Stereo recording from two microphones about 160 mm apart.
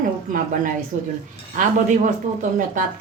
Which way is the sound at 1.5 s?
55° right (ahead or behind).